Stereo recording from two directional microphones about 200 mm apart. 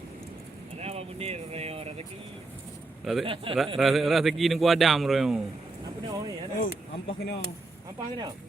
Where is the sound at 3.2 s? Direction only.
25° right (ahead or behind).